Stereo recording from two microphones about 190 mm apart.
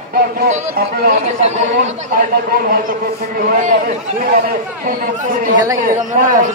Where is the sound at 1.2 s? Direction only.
35° right (ahead or behind).